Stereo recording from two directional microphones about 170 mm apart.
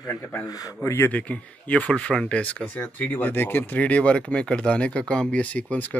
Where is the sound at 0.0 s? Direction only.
20° left (ahead or behind).